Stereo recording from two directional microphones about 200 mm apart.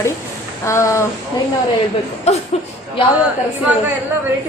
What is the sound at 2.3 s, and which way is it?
Speech, 35° left (ahead or behind).